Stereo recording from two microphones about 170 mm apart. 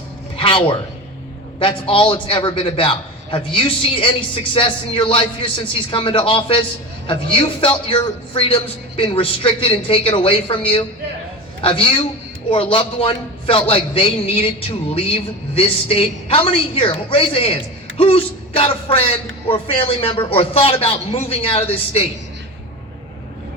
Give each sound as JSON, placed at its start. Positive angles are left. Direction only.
{"t": 0.3, "sound": "a sound", "side_deg": 30}
{"t": 1.5, "sound": "a man's voice", "side_deg": 30}
{"t": 11.6, "sound": "a man's voice", "side_deg": 30}